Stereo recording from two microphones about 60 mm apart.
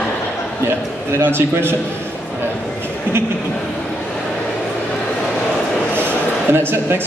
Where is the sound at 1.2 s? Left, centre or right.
Right.